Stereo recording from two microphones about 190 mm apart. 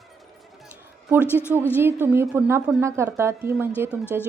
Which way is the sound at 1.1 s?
10° right (ahead or behind).